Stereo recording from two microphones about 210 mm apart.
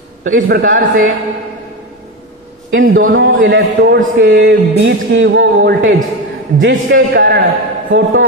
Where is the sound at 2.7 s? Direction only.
65° right (ahead or behind).